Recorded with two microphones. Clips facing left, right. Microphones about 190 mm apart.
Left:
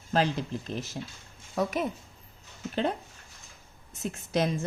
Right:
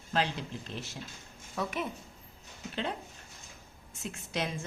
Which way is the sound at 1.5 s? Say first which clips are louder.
Left 6 dB; 40° left (ahead or behind).